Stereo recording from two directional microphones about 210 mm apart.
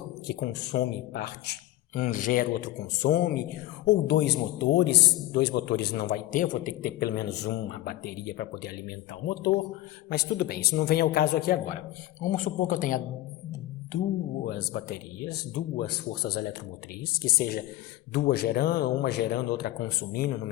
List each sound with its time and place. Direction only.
0.3 s speech: 50° left (ahead or behind)
2.0 s speech: 40° left (ahead or behind)
14.4 s speech: 45° left (ahead or behind)